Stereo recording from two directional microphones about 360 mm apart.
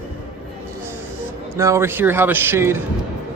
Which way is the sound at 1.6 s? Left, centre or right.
Centre.